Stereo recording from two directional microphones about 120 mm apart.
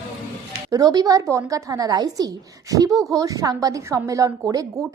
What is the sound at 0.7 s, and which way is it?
A woman's voice, 30° right (ahead or behind).